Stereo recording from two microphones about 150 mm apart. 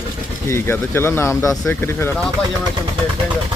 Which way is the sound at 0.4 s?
15° left (ahead or behind).